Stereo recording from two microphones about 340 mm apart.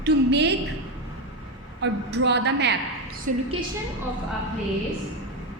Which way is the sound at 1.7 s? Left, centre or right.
Right.